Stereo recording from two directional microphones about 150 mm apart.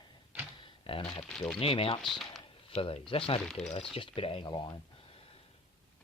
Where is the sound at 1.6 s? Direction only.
40° left (ahead or behind).